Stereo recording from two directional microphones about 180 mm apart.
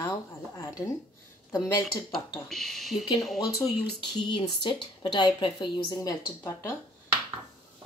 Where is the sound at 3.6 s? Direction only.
25° left (ahead or behind).